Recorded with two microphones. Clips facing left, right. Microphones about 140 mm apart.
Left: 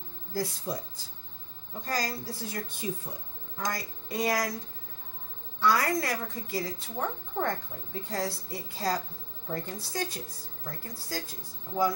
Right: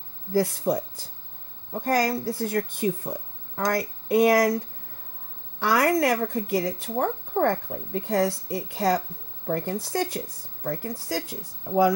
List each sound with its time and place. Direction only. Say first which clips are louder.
0.3 s speech: right 10 dB; 60° right (ahead or behind)
5.6 s speech: right 5 dB; 65° right (ahead or behind)